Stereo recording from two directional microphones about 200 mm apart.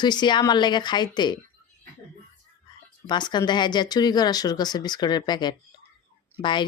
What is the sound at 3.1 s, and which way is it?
Speech, 20° left (ahead or behind).